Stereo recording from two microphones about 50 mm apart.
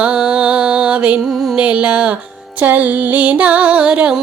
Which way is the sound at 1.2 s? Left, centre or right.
Centre.